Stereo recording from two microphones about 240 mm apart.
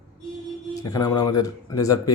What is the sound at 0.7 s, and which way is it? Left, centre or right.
Speech, centre.